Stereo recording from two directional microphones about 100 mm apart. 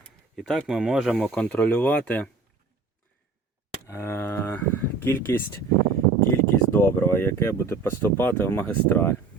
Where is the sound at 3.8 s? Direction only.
25° left (ahead or behind).